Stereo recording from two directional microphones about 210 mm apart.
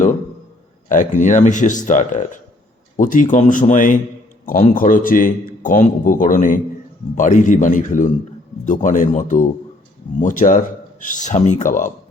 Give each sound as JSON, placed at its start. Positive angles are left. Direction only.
{"t": 0.9, "sound": "speech", "side_deg": 35}